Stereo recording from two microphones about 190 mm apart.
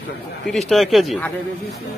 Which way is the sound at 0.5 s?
Centre (ahead or behind).